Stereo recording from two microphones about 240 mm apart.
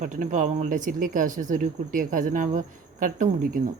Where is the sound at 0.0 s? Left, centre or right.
Right.